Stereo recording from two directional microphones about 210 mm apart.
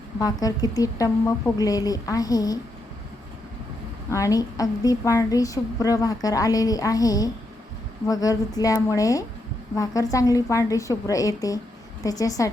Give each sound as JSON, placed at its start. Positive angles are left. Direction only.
{"t": 0.2, "sound": "a woman's voice", "side_deg": 15}
{"t": 4.1, "sound": "a woman's voice", "side_deg": 15}